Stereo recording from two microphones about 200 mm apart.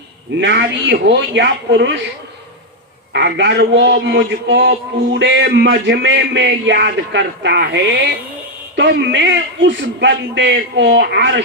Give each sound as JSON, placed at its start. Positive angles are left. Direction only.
{"t": 0.3, "sound": "a man's voice", "side_deg": -60}
{"t": 3.1, "sound": "a man's voice", "side_deg": -60}